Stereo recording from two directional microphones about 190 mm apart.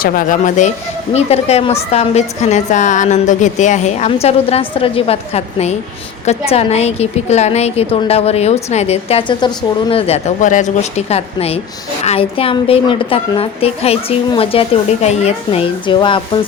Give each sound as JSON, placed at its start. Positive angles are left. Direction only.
{"t": 0.0, "sound": "a woman's voice", "side_deg": 45}